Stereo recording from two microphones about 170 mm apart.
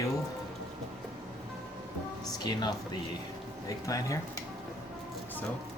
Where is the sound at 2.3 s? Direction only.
25° left (ahead or behind).